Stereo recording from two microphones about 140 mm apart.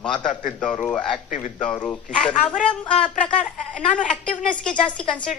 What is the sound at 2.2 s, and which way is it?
A woman's voice, 5° left (ahead or behind).